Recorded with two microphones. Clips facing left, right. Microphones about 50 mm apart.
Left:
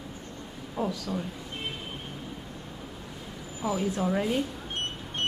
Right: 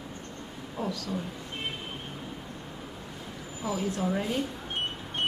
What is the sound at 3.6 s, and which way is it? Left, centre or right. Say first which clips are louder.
Speech: left 2 dB; centre.